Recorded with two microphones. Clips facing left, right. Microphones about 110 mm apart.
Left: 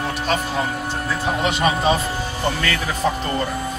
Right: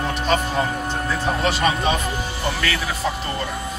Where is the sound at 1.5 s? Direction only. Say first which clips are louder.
Left 3 dB; 25° left (ahead or behind).